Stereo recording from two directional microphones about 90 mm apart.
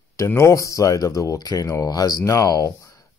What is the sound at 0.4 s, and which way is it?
Speech, 35° left (ahead or behind).